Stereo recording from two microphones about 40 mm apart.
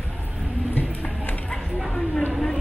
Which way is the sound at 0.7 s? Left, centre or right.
Left.